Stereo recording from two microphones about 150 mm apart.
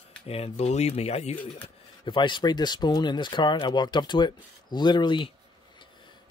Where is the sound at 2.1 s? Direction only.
30° left (ahead or behind).